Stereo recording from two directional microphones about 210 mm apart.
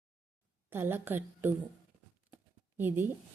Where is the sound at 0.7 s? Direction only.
10° right (ahead or behind).